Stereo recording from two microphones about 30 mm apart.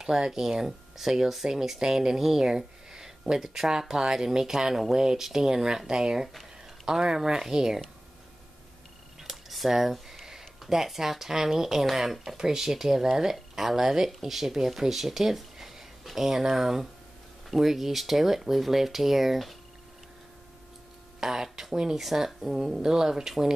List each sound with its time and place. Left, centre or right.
0.0 s speech: right
0.3 s speech: centre
6.2 s a sound: centre
7.0 s speech: right
9.3 s speech: centre
21.2 s speech: centre